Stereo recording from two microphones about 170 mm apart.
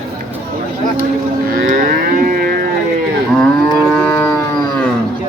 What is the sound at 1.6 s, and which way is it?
Livestock, 50° right (ahead or behind).